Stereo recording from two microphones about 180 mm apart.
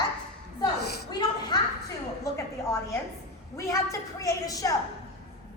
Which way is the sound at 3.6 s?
15° left (ahead or behind).